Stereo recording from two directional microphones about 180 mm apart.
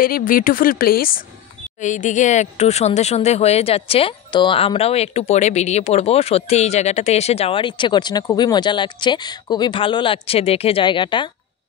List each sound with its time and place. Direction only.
0.0 s speech: 50° left (ahead or behind)
1.8 s speech: 45° left (ahead or behind); by 11.2 s 25° left (ahead or behind)